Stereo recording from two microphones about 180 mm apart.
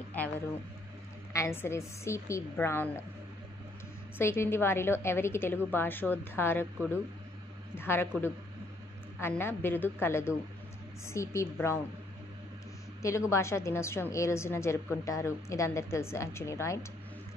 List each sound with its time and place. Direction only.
0.2 s a woman's voice: 10° left (ahead or behind)
4.2 s a woman's voice: 15° left (ahead or behind)
7.7 s a woman's voice: 10° left (ahead or behind)
9.2 s a woman's voice: 10° left (ahead or behind)
13.3 s a woman's voice: 15° left (ahead or behind)